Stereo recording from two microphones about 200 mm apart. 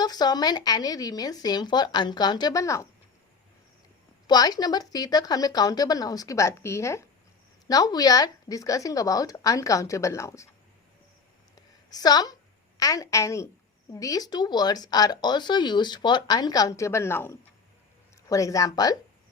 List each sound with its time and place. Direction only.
0.0 s speech: 20° left (ahead or behind)
4.3 s speech: 20° left (ahead or behind)
11.9 s a woman's voice: 20° left (ahead or behind)